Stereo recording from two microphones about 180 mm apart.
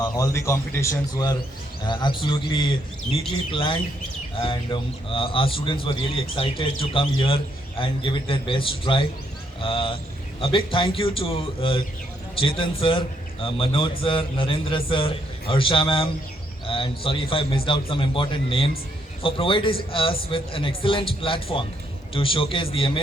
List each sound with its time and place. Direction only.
0.2 s a man's voice: 15° left (ahead or behind)